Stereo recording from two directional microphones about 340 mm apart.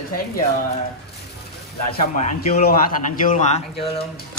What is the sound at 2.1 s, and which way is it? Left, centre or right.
Speech, left.